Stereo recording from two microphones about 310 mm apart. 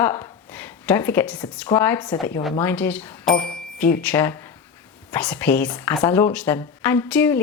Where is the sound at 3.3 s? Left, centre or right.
Left.